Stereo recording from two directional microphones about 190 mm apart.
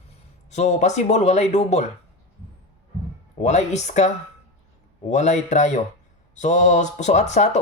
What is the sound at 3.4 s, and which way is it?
Speech, 40° left (ahead or behind).